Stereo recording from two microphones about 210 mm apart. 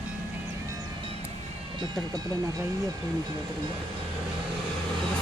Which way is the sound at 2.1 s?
20° right (ahead or behind).